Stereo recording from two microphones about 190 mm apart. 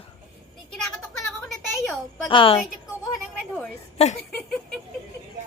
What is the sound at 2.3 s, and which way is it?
Speech, 25° left (ahead or behind).